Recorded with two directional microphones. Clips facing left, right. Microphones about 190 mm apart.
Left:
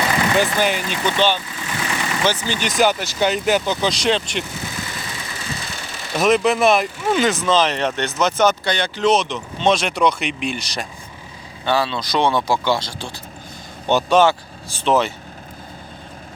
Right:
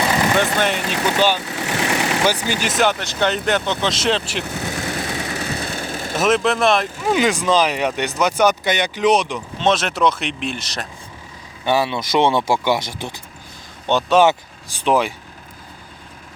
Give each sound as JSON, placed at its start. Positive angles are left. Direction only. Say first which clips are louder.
{"t": 0.3, "sound": "speech", "louder": "even", "side_deg": 0}
{"t": 1.0, "sound": "speech", "louder": "right 1 dB", "side_deg": -10}
{"t": 1.5, "sound": "vehicle", "louder": "right 5 dB", "side_deg": -70}
{"t": 2.2, "sound": "speech", "louder": "right 1 dB", "side_deg": -10}
{"t": 4.4, "sound": "vehicle", "louder": "right 5 dB", "side_deg": -65}
{"t": 6.1, "sound": "speech", "louder": "left 1 dB", "side_deg": 0}
{"t": 7.1, "sound": "speech", "louder": "right 1 dB", "side_deg": -10}
{"t": 9.6, "sound": "speech", "louder": "left 1 dB", "side_deg": 0}
{"t": 11.6, "sound": "speech", "louder": "right 1 dB", "side_deg": -20}
{"t": 13.8, "sound": "speech", "louder": "even", "side_deg": 5}
{"t": 14.8, "sound": "speech", "louder": "even", "side_deg": -10}